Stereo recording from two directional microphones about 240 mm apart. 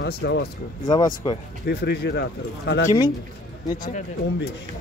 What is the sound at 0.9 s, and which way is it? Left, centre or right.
Speech, centre.